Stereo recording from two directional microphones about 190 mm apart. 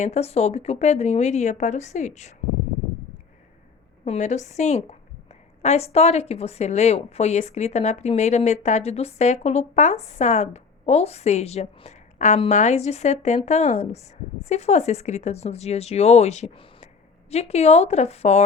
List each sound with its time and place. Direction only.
0.0 s speech: 35° left (ahead or behind)
4.0 s speech: 35° left (ahead or behind)